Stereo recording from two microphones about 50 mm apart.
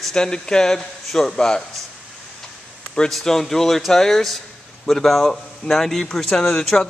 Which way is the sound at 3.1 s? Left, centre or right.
Centre.